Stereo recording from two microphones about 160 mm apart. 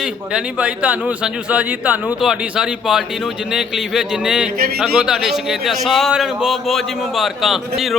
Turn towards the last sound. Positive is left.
turn(degrees=0)  # may be behind; listen again after turning